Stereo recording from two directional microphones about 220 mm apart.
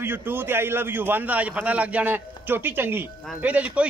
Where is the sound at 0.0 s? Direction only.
10° right (ahead or behind).